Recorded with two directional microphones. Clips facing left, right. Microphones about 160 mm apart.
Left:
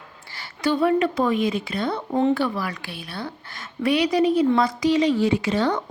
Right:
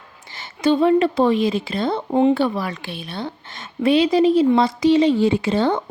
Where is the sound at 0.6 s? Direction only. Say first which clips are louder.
Right 4 dB; 25° right (ahead or behind).